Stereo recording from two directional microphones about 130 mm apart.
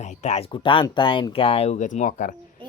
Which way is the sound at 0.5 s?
40° left (ahead or behind).